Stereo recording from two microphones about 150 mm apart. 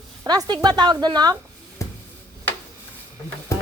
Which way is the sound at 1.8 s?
20° left (ahead or behind).